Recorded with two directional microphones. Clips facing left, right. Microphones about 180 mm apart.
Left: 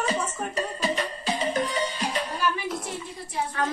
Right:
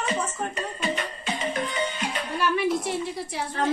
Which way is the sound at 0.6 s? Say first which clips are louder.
Left 4 dB; 35° left (ahead or behind).